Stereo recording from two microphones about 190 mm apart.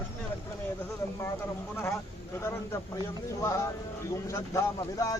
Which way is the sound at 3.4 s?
15° left (ahead or behind).